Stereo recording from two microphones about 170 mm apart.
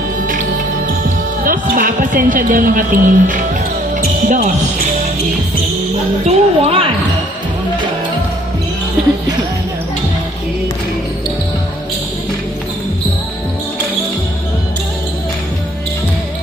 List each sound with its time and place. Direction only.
1.5 s a woman's voice: 55° right (ahead or behind)
6.2 s children playing: 35° right (ahead or behind)